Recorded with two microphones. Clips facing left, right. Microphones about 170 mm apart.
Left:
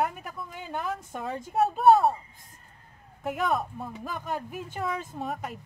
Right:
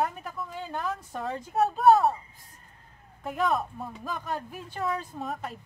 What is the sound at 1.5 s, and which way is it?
Speech, centre (ahead or behind).